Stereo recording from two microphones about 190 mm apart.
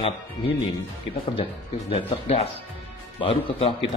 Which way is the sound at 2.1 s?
30° left (ahead or behind).